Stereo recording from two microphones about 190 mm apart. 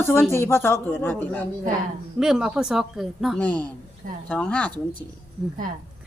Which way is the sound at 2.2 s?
5° right (ahead or behind).